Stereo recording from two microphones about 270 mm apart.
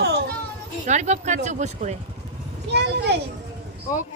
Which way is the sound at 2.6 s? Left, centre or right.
Right.